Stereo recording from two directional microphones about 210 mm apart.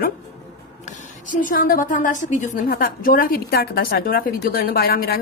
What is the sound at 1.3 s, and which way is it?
A woman's voice, 40° left (ahead or behind).